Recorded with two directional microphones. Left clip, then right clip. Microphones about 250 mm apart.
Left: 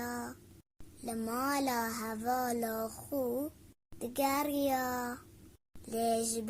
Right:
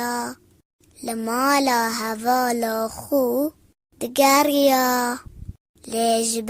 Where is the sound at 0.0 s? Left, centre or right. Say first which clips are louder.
Right 14 dB; right.